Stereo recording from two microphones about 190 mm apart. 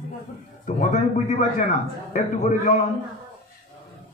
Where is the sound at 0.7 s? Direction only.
40° left (ahead or behind).